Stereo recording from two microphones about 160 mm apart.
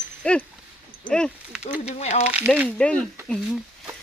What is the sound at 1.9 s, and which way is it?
Speech, 45° left (ahead or behind).